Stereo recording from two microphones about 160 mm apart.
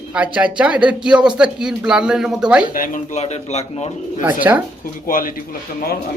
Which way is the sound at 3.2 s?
40° left (ahead or behind).